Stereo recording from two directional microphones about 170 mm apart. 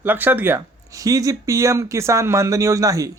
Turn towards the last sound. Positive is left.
turn(degrees=-20)  # may be behind; listen again after turning